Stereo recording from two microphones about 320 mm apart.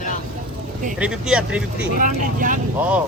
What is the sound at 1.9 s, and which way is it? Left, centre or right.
Speech, right.